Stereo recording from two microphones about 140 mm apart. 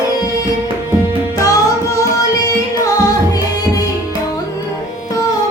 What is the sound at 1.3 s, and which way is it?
Music, 25° left (ahead or behind).